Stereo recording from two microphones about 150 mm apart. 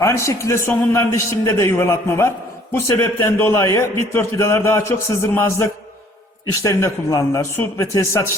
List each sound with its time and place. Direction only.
0.0 s a man's voice: 20° left (ahead or behind)